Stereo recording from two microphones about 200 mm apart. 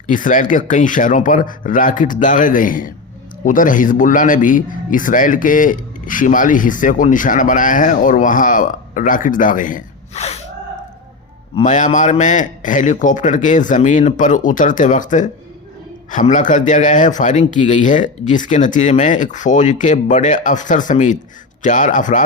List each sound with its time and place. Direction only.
0.1 s speech: 40° left (ahead or behind)
11.5 s speech: 40° left (ahead or behind)